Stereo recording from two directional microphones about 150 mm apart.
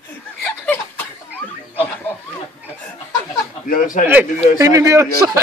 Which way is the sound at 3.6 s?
70° left (ahead or behind).